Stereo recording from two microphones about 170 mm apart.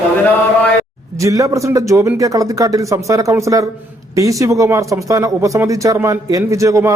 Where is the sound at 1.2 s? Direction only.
20° right (ahead or behind).